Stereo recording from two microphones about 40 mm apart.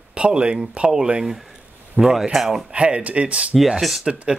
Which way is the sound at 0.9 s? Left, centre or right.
Centre.